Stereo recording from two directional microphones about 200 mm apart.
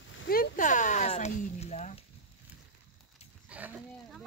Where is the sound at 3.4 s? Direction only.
5° right (ahead or behind).